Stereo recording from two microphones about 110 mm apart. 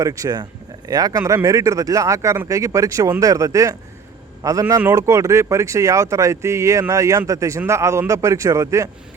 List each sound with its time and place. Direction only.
0.0 s speech: 30° right (ahead or behind)